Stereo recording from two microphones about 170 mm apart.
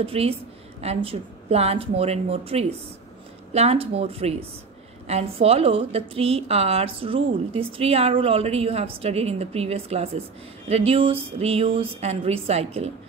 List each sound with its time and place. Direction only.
0.0 s a woman's voice: 35° right (ahead or behind)